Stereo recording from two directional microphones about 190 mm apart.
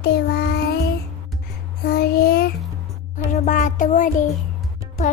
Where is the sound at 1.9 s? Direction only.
55° left (ahead or behind).